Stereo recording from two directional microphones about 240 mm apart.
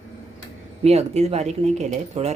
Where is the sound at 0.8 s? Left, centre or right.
Right.